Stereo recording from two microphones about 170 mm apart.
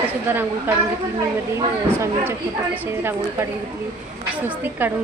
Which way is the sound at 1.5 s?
15° right (ahead or behind).